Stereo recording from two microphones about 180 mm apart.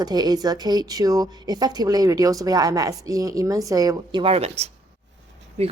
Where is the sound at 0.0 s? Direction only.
20° right (ahead or behind).